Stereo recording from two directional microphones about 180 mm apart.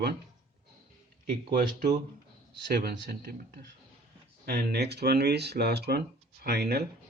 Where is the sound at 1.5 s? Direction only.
50° right (ahead or behind).